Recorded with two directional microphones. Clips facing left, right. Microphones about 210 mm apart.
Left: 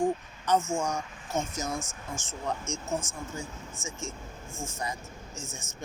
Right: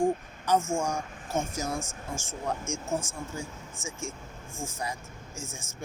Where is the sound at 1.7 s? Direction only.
30° right (ahead or behind).